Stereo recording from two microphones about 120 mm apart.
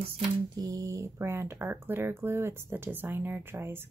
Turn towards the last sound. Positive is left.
turn(degrees=-20)  # may be behind; listen again after turning